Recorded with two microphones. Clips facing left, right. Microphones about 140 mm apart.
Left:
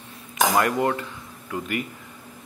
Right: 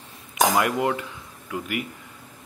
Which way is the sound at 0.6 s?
10° right (ahead or behind).